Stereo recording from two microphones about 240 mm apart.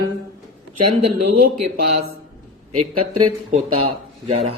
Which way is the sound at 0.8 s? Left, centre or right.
Right.